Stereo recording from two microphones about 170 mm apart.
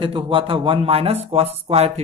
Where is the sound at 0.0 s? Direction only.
30° right (ahead or behind).